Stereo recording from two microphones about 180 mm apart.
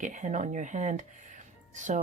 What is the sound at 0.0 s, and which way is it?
Speech, 45° right (ahead or behind).